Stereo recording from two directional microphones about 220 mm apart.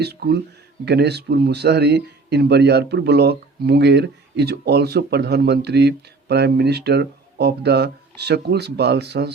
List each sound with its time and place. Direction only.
0.0 s a man's voice: 45° right (ahead or behind)